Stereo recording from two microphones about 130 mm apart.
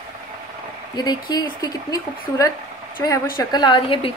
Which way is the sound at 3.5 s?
35° left (ahead or behind).